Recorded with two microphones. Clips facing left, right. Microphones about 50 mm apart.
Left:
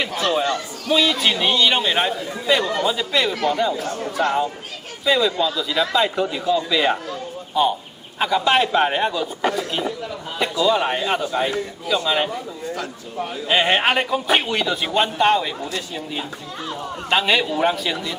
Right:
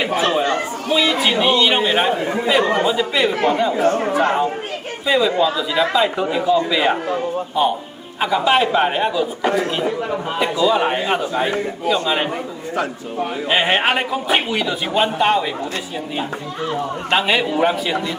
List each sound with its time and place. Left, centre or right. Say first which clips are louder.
0.4 s chatter: right 3 dB; right
1.4 s speech: right 4 dB; centre
2.6 s a man's voice: right 6 dB; right
2.8 s speech: right 3 dB; right
3.2 s a man's voice: right 3 dB; right
5.0 s a man's voice: right 2 dB; centre
9.5 s a man's voice: right 5 dB; right
10.4 s a man's voice: right 1 dB; centre
11.3 s a man's voice: right 2 dB; right
12.0 s a man's voice: right 1 dB; centre
17.1 s a man's voice: right 1 dB; centre